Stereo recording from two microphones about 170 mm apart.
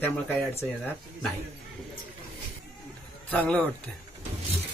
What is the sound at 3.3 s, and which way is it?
Speech, 10° left (ahead or behind).